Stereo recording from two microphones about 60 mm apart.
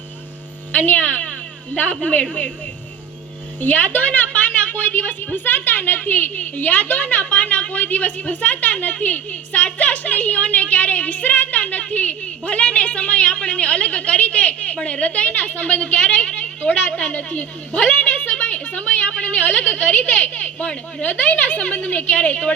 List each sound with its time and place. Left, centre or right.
0.7 s a woman's voice: left
3.6 s a woman's voice: left